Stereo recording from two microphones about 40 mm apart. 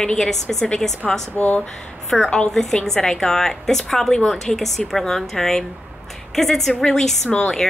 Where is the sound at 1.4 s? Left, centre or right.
Left.